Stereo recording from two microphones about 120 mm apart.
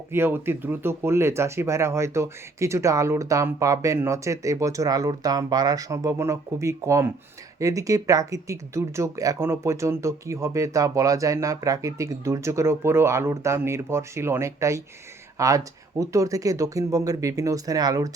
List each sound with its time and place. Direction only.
0.1 s speech: 20° right (ahead or behind)